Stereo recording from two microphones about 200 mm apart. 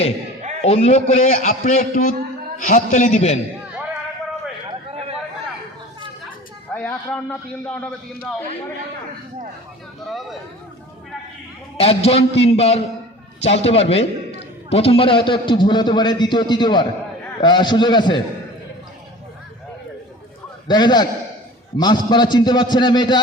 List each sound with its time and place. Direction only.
0.6 s a man's voice: 30° left (ahead or behind)
6.7 s a man's voice: 5° left (ahead or behind)
10.1 s speech: centre (ahead or behind)
11.8 s a man's voice: 30° left (ahead or behind)
20.7 s a man's voice: 20° left (ahead or behind)